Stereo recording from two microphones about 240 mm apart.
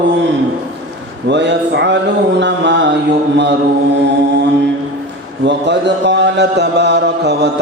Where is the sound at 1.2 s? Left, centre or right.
Right.